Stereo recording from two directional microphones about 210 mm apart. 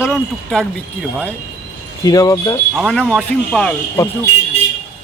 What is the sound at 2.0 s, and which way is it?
Speech, 15° left (ahead or behind).